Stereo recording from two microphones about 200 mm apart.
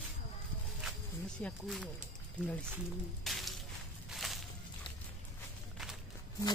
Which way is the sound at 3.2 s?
Centre (ahead or behind).